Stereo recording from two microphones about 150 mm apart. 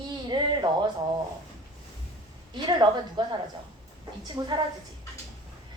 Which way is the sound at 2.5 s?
30° right (ahead or behind).